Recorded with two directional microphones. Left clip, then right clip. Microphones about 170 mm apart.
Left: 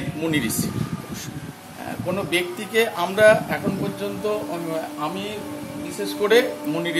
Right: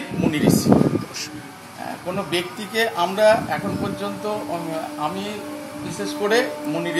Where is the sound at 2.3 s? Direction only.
15° left (ahead or behind).